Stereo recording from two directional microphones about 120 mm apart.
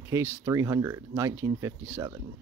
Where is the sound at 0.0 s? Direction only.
20° right (ahead or behind).